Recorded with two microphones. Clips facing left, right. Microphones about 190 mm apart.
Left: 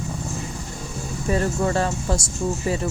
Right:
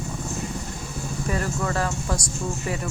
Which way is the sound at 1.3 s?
30° left (ahead or behind).